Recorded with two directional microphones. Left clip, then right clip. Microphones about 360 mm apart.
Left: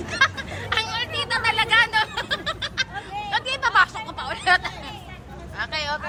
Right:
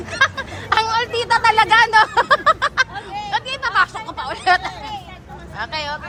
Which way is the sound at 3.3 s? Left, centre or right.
Centre.